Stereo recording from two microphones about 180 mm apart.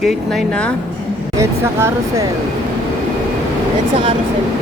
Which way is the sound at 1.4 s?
15° right (ahead or behind).